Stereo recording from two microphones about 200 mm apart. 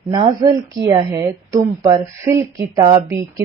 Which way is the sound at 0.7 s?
20° right (ahead or behind).